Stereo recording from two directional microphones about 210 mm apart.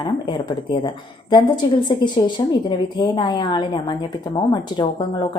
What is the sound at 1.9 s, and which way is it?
A woman's voice, 20° left (ahead or behind).